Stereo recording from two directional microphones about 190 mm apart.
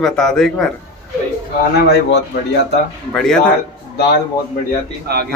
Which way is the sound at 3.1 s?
5° left (ahead or behind).